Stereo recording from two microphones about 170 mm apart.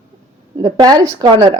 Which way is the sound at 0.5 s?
25° right (ahead or behind).